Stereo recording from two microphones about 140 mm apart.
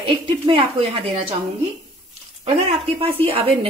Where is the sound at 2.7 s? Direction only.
40° right (ahead or behind).